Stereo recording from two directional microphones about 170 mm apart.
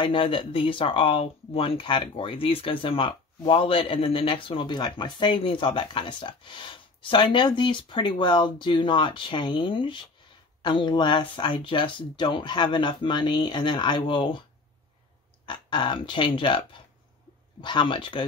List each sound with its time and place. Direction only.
0.0 s speech: 30° left (ahead or behind)
15.4 s speech: 30° left (ahead or behind)